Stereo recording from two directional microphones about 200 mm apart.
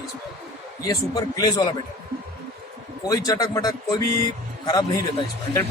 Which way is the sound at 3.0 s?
20° left (ahead or behind).